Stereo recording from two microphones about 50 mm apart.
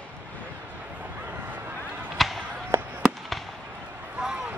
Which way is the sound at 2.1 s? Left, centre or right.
Centre.